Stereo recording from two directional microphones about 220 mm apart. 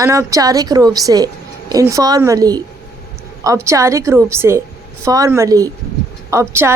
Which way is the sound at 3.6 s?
15° right (ahead or behind).